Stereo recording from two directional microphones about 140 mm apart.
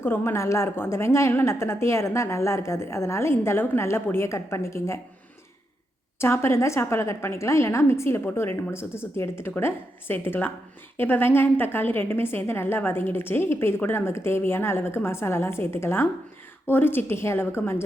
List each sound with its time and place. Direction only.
0.0 s a woman's voice: 15° left (ahead or behind)
6.1 s a woman's voice: 20° left (ahead or behind)